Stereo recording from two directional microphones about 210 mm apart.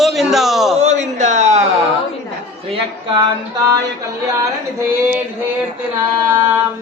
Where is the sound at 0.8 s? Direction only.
35° right (ahead or behind).